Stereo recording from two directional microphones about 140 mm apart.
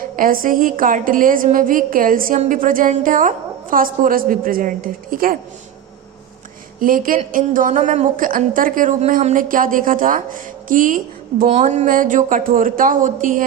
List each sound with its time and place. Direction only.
0.0 s a woman's voice: 90° right
6.7 s speech: 85° right
7.3 s a woman's voice: 75° right (ahead or behind)
11.4 s a woman's voice: 55° right (ahead or behind); by 13.4 s 70° right (ahead or behind)